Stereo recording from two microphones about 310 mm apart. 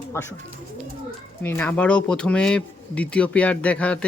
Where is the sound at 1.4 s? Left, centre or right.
Centre.